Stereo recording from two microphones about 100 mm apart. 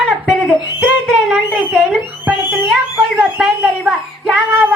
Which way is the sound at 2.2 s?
15° right (ahead or behind).